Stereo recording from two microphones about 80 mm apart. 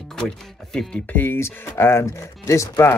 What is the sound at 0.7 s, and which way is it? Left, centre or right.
Speech, centre.